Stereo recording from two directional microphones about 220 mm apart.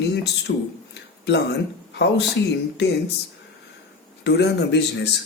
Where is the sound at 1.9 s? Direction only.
50° left (ahead or behind).